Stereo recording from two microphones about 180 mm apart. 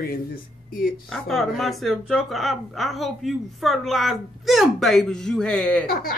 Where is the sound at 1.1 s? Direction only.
Centre (ahead or behind).